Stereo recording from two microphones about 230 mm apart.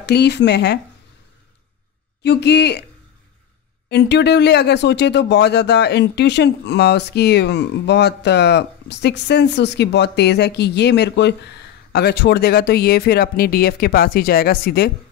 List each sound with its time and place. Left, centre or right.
0.0 s speech: left
2.2 s speech: left
3.9 s speech: left